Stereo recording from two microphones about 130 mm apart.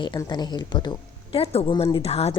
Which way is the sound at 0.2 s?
30° left (ahead or behind).